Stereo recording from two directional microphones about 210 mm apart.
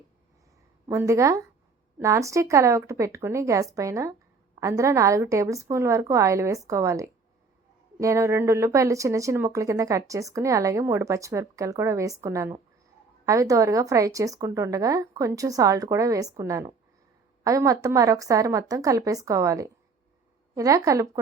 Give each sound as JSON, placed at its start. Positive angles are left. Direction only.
{"t": 0.9, "sound": "speech", "side_deg": -15}